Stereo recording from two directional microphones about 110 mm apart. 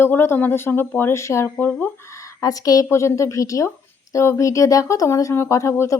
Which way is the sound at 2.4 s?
35° left (ahead or behind).